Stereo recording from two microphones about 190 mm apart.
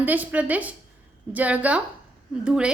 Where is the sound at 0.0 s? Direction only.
10° right (ahead or behind).